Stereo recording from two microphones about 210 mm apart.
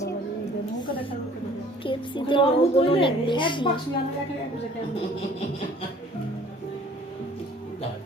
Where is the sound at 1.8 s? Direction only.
25° left (ahead or behind).